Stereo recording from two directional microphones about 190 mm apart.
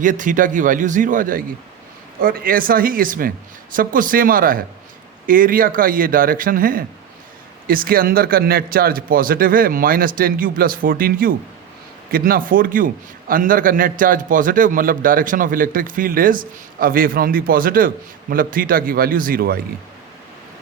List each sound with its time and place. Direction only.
0.0 s a man's voice: 45° right (ahead or behind)